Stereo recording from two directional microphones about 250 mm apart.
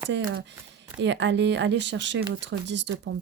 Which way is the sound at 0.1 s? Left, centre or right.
Right.